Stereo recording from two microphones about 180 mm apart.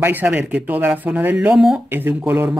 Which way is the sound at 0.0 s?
10° right (ahead or behind).